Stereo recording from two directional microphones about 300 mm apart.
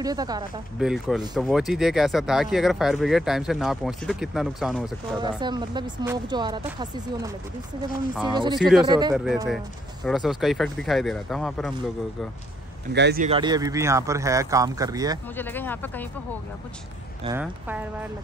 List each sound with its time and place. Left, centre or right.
0.0 s speech: centre
0.7 s speech: centre
5.4 s speech: centre
8.5 s speech: centre
8.8 s speech: centre
9.1 s speech: centre
12.9 s speech: right
13.3 s speech: centre
15.3 s speech: centre
17.2 s speech: centre